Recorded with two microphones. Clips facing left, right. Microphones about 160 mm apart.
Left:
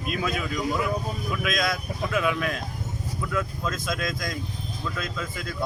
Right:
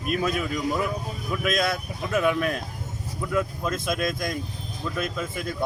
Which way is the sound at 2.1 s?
45° right (ahead or behind).